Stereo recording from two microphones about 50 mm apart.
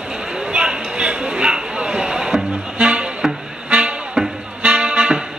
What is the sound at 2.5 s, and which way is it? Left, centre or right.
Music, right.